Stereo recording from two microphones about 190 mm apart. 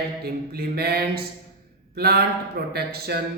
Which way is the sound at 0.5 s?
55° right (ahead or behind).